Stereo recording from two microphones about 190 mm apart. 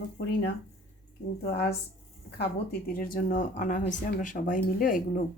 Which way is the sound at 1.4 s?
55° left (ahead or behind).